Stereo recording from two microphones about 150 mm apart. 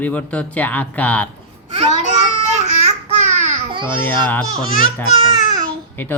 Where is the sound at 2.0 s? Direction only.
50° right (ahead or behind).